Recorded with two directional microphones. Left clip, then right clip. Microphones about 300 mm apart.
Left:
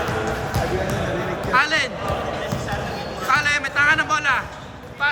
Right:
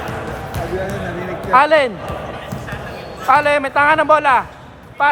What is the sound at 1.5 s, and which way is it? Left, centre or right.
Speech, centre.